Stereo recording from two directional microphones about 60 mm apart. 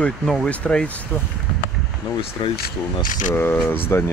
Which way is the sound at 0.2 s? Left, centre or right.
Centre.